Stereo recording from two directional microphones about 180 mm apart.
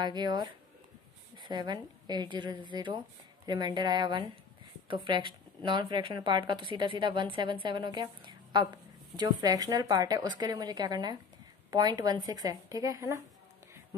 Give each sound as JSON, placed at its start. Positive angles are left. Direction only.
{"t": 0.0, "sound": "a woman's voice", "side_deg": -25}